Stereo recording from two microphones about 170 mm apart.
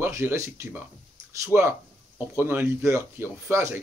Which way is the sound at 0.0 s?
15° right (ahead or behind).